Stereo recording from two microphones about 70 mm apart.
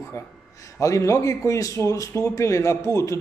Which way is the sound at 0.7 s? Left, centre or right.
Left.